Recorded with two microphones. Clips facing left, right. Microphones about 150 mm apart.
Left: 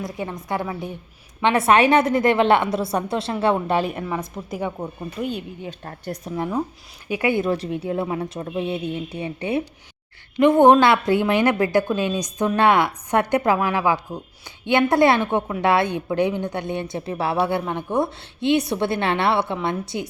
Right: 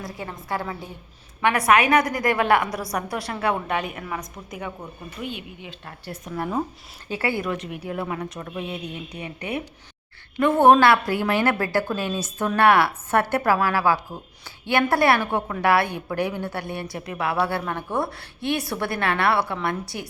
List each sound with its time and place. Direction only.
0.0 s a woman's voice: 20° left (ahead or behind)
5.2 s a woman's voice: 40° left (ahead or behind)
7.1 s speech: 15° left (ahead or behind)
7.5 s a woman's voice: 30° left (ahead or behind)